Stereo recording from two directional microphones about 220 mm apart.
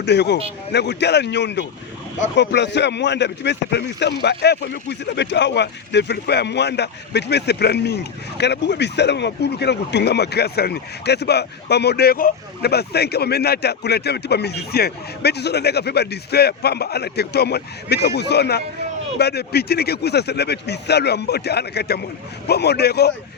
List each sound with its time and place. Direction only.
0.0 s speech: 50° left (ahead or behind)